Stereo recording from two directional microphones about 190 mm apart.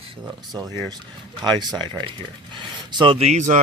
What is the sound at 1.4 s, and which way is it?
Speech, 25° right (ahead or behind).